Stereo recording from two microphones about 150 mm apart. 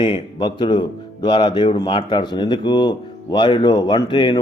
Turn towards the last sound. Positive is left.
turn(degrees=30)  # may be behind; listen again after turning